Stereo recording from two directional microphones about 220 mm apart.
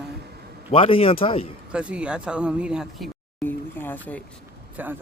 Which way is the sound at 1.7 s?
5° right (ahead or behind).